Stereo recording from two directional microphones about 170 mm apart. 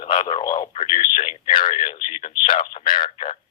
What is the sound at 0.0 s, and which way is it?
A man's voice, 30° left (ahead or behind).